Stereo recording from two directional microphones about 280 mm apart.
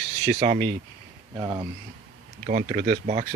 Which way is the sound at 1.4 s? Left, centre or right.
Centre.